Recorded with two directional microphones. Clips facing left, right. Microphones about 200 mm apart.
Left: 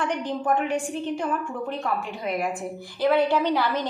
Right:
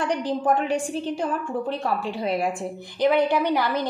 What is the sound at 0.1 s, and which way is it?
A woman's voice, 35° right (ahead or behind).